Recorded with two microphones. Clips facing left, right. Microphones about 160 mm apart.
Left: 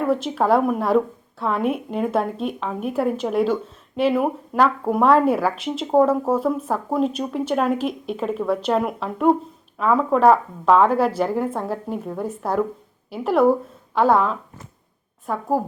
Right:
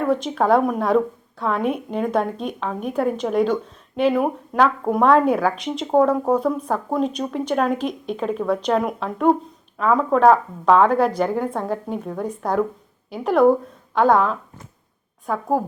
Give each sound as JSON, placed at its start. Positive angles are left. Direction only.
{"t": 0.0, "sound": "a woman's voice", "side_deg": 5}